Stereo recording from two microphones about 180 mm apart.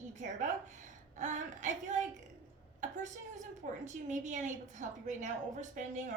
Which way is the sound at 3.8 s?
40° right (ahead or behind).